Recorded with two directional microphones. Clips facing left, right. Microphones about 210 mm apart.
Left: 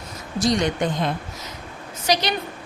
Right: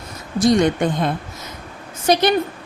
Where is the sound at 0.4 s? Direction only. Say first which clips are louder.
Right 6 dB; 50° right (ahead or behind).